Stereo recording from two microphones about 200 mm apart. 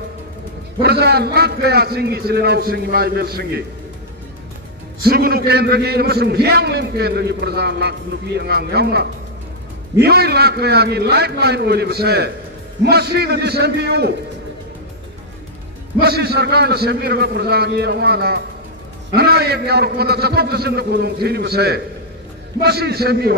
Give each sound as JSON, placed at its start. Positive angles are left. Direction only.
{"t": 0.8, "sound": "a man's voice", "side_deg": -55}
{"t": 5.0, "sound": "a man's voice", "side_deg": -50}
{"t": 16.0, "sound": "a man's voice", "side_deg": -50}